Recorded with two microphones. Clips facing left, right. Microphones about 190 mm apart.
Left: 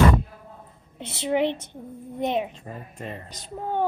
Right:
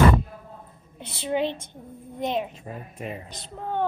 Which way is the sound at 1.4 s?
70° left (ahead or behind).